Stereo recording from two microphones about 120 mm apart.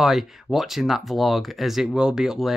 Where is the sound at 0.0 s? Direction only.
Centre (ahead or behind).